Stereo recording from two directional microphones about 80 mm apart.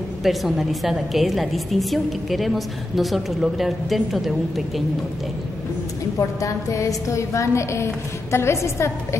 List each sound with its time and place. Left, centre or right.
0.2 s a woman's voice: centre
6.1 s a woman's voice: left